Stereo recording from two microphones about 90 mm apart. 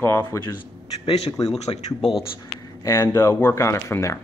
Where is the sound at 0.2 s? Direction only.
45° left (ahead or behind).